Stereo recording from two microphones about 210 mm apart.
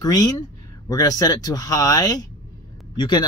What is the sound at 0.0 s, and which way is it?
Speech, 15° left (ahead or behind).